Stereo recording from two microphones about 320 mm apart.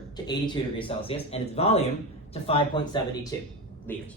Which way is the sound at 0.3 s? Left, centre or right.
Centre.